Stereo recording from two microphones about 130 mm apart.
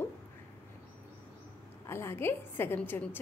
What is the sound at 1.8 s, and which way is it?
A woman's voice, 20° left (ahead or behind).